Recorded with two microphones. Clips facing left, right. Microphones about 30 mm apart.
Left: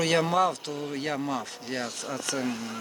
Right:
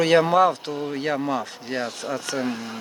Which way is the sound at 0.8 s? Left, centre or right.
Centre.